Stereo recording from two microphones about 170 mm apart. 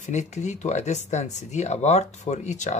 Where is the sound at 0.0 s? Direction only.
45° left (ahead or behind).